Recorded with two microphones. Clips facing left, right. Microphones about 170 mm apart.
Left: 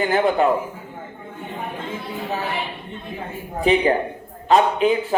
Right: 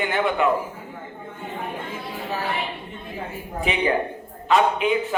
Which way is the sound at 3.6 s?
35° left (ahead or behind).